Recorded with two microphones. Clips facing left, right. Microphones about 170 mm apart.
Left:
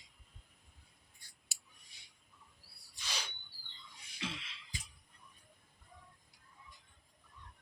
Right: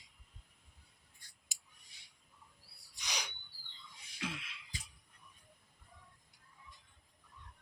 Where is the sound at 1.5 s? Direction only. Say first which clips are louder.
Left 1 dB; 15° right (ahead or behind).